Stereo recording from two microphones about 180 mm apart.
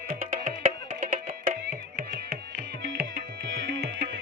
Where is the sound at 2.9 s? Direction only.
65° right (ahead or behind).